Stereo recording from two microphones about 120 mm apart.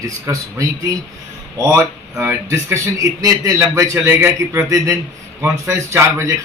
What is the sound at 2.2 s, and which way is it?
A man's voice, 20° right (ahead or behind).